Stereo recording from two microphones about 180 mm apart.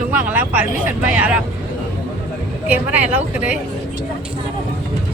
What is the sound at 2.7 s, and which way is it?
Speech, 10° right (ahead or behind).